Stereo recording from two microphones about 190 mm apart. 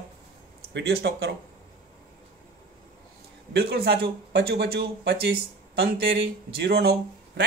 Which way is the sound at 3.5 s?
55° right (ahead or behind).